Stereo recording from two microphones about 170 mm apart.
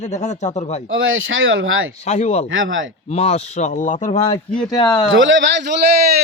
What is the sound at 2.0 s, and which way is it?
Speech, 40° left (ahead or behind).